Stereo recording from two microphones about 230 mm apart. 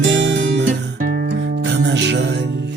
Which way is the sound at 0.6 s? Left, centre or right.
Right.